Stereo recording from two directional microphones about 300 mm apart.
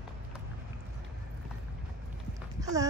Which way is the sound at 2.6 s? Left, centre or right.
Centre.